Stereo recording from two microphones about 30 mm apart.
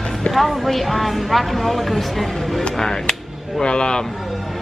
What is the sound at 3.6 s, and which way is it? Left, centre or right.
Speech, left.